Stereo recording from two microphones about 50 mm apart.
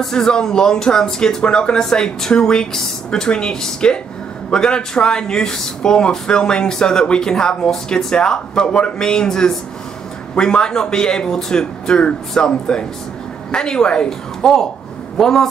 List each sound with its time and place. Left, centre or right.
0.0 s a woman's voice: centre